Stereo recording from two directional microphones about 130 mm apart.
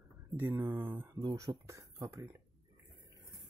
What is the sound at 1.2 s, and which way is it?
Speech, 30° right (ahead or behind).